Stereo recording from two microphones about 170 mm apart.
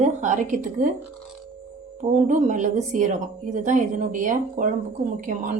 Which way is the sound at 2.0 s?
45° right (ahead or behind).